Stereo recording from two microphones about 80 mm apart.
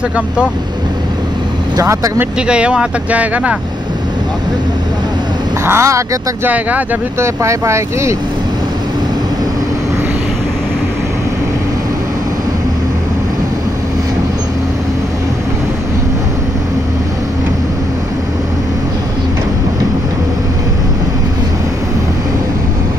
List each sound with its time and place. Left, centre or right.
1.8 s speech: right
2.4 s speech: centre
5.7 s speech: right
6.4 s speech: right
7.2 s speech: right